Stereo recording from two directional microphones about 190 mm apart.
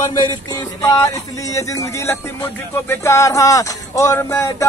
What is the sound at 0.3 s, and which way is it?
Music, 20° left (ahead or behind).